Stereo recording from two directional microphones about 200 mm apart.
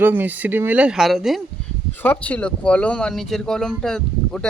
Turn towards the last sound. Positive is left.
turn(degrees=5)  # may be behind; listen again after turning